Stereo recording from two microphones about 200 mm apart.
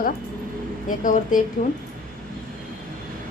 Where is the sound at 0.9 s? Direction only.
40° left (ahead or behind).